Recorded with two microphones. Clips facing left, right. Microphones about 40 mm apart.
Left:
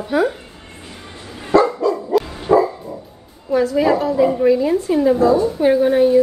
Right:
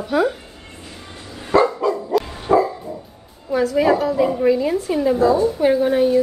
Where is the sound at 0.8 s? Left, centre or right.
Left.